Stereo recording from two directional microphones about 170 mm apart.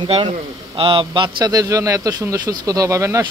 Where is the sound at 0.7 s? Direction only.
30° right (ahead or behind).